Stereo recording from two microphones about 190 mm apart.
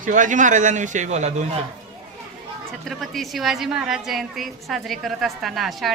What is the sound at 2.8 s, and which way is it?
A woman's voice, centre (ahead or behind).